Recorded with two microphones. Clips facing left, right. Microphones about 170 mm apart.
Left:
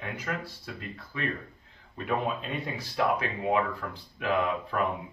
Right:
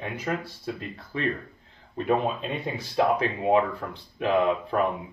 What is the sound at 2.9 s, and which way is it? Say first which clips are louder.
Speech: right 5 dB; 25° right (ahead or behind).